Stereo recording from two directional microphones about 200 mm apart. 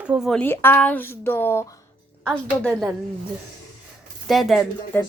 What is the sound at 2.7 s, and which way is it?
Speech, 5° right (ahead or behind).